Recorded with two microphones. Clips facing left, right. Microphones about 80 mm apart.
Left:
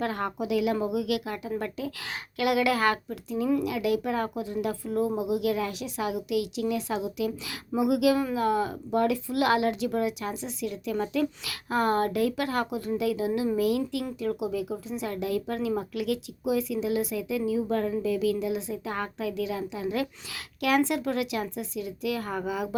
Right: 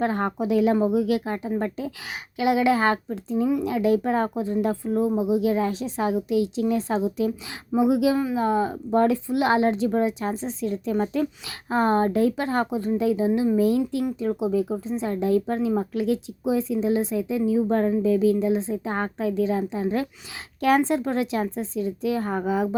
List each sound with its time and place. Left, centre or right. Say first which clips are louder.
0.0 s speech: right 5 dB; right